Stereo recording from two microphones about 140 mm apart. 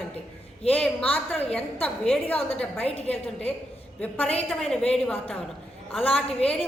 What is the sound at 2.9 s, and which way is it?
Speech, 45° left (ahead or behind).